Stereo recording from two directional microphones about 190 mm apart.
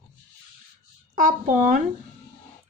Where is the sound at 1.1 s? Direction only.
45° right (ahead or behind).